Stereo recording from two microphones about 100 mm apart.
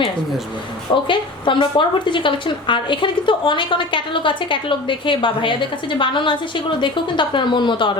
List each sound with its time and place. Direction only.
1.0 s a woman's voice: 55° left (ahead or behind)